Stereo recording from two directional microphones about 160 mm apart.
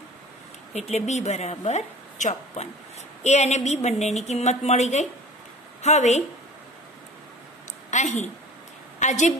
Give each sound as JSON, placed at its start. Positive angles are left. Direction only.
{"t": 0.7, "sound": "a woman's voice", "side_deg": 45}
{"t": 7.9, "sound": "a woman's voice", "side_deg": 45}